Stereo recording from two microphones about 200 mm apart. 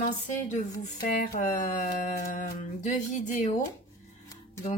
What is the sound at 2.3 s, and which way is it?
A woman's voice, 40° left (ahead or behind).